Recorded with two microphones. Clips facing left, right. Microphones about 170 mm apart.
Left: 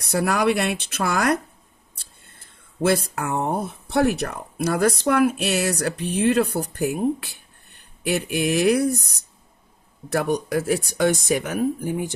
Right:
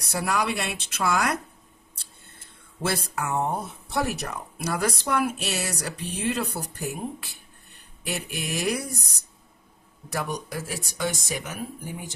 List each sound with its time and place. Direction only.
0.0 s speech: 60° left (ahead or behind)
2.8 s speech: 55° left (ahead or behind)
10.1 s speech: 60° left (ahead or behind)